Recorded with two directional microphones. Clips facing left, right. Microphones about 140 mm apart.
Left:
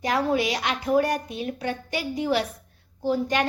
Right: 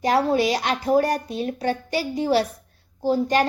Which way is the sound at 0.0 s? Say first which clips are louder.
Right 4 dB; 35° right (ahead or behind).